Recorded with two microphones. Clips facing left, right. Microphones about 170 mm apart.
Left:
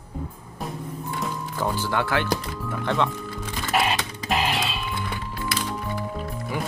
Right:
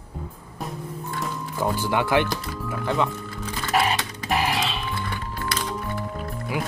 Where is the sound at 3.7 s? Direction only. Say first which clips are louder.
Right 1 dB; 20° left (ahead or behind).